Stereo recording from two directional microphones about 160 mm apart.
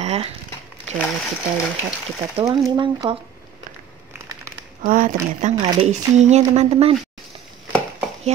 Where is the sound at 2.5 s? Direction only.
20° right (ahead or behind).